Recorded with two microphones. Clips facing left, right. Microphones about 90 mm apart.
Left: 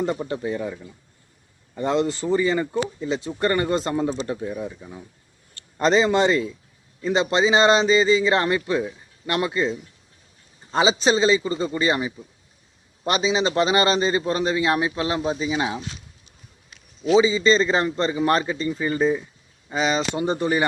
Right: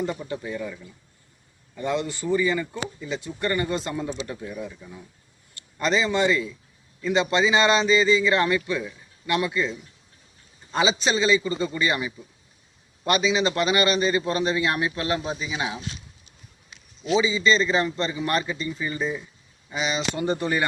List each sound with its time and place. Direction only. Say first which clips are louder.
0.0 s a man's voice: left 4 dB; 35° left (ahead or behind)
17.2 s a man's voice: left 4 dB; 35° left (ahead or behind)
20.1 s a man's voice: left 3 dB; 25° left (ahead or behind)